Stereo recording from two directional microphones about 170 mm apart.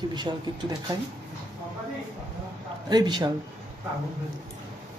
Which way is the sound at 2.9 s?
25° right (ahead or behind).